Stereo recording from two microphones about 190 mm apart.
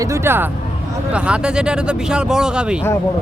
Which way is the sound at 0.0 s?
15° right (ahead or behind).